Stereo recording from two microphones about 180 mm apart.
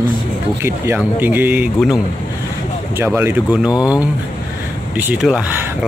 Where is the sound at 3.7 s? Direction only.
20° left (ahead or behind).